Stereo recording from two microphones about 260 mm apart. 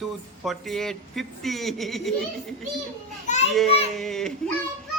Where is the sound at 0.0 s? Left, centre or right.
Centre.